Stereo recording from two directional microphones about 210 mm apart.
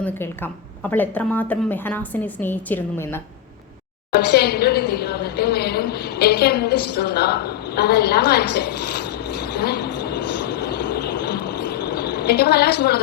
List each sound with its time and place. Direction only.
0.0 s a woman's voice: 10° left (ahead or behind)
4.1 s a woman's voice: 50° left (ahead or behind)